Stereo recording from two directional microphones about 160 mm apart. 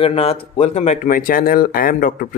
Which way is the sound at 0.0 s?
35° left (ahead or behind).